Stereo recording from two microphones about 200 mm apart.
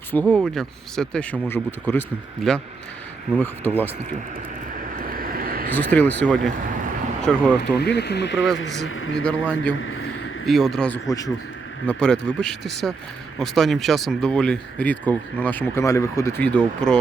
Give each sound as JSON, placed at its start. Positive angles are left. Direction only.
{"t": 0.1, "sound": "speech", "side_deg": 5}
{"t": 4.9, "sound": "vehicle", "side_deg": -45}
{"t": 5.7, "sound": "speech", "side_deg": 10}
{"t": 7.8, "sound": "speech", "side_deg": 55}
{"t": 8.5, "sound": "speech", "side_deg": 80}
{"t": 9.2, "sound": "speech", "side_deg": 5}